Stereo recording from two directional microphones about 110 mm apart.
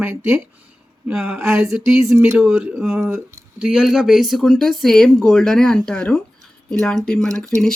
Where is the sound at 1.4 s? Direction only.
25° right (ahead or behind).